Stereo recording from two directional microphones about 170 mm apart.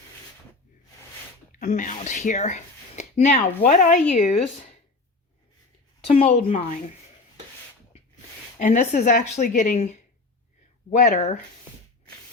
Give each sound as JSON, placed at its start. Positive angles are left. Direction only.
{"t": 1.5, "sound": "speech", "side_deg": 50}
{"t": 6.1, "sound": "a woman's voice", "side_deg": 35}
{"t": 8.5, "sound": "speech", "side_deg": 50}